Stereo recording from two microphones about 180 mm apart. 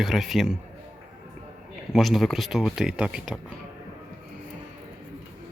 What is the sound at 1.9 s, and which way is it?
Speech, centre (ahead or behind).